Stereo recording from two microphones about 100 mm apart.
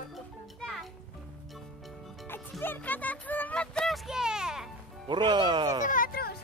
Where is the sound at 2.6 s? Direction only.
20° left (ahead or behind).